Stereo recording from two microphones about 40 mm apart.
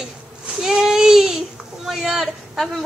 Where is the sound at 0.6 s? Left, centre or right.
Centre.